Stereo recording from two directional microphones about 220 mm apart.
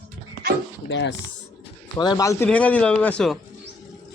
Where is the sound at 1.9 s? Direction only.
15° left (ahead or behind).